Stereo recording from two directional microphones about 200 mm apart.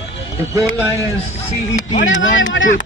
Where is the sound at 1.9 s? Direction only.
65° left (ahead or behind).